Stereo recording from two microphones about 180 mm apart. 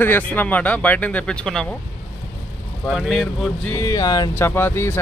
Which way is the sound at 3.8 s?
20° left (ahead or behind).